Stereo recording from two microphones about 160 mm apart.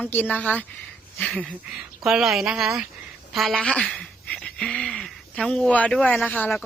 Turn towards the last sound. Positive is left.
turn(degrees=5)  # may be behind; listen again after turning